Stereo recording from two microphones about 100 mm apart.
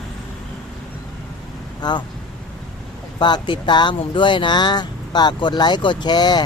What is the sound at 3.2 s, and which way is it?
Speech, 50° left (ahead or behind).